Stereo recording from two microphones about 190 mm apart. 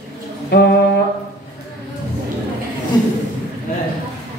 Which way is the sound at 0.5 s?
60° left (ahead or behind).